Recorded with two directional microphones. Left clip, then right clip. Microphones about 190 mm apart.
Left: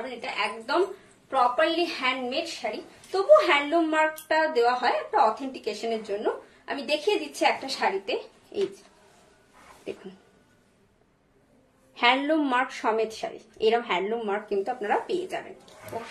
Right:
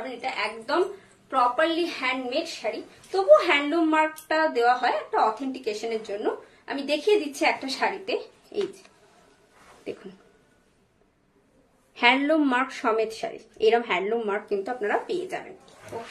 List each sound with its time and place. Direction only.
0.2 s a woman's voice: 15° right (ahead or behind)
11.9 s speech: 25° right (ahead or behind)